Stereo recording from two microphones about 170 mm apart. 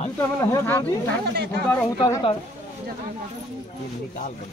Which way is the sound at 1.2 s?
65° right (ahead or behind).